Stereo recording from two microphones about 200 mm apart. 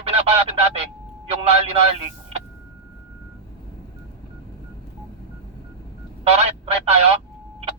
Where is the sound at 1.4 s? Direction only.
30° right (ahead or behind).